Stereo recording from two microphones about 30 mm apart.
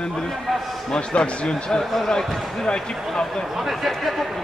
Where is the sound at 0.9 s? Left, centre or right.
Left.